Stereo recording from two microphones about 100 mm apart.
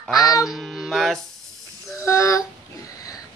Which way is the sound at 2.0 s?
30° left (ahead or behind).